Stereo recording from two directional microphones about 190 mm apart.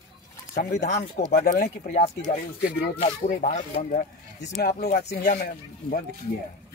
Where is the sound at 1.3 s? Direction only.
55° left (ahead or behind).